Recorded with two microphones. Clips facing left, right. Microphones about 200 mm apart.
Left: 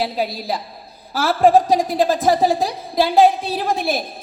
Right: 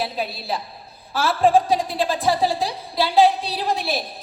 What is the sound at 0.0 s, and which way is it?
A woman's voice, 35° left (ahead or behind).